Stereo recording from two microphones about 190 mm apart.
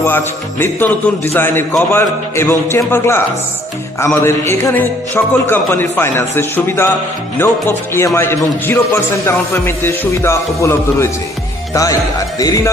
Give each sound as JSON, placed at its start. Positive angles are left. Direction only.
{"t": 0.6, "sound": "speech", "side_deg": 10}
{"t": 4.2, "sound": "speech", "side_deg": 15}